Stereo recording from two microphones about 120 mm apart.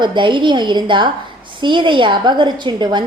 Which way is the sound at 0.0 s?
40° right (ahead or behind).